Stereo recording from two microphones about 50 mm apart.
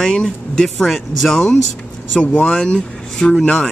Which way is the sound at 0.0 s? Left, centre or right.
Centre.